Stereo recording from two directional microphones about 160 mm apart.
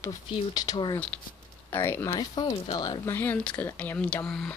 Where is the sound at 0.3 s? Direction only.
25° left (ahead or behind).